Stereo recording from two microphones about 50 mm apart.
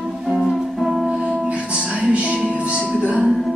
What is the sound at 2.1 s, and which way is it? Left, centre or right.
Music, right.